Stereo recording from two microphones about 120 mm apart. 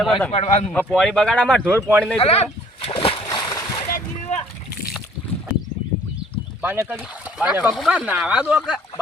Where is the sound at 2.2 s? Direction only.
55° left (ahead or behind).